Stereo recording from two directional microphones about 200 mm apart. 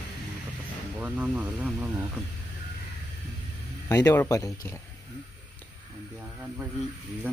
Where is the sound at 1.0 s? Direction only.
10° right (ahead or behind).